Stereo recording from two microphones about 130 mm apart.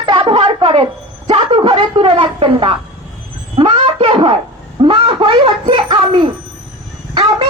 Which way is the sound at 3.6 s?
40° right (ahead or behind).